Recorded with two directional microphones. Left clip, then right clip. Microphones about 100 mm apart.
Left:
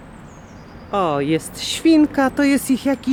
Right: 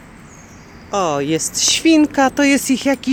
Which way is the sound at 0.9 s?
Centre (ahead or behind).